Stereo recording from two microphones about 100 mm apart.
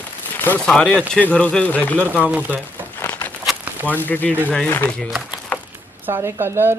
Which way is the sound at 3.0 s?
20° left (ahead or behind).